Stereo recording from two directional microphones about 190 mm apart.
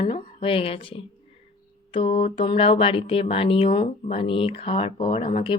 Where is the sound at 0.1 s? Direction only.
30° left (ahead or behind).